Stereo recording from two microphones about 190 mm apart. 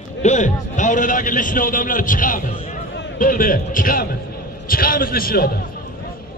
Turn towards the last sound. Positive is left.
turn(degrees=50)  # may be behind; listen again after turning